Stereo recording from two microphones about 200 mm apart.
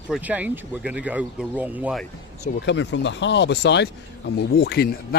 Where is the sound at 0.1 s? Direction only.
10° right (ahead or behind).